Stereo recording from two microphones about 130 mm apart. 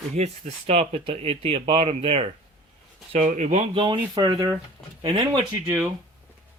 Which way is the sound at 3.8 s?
35° right (ahead or behind).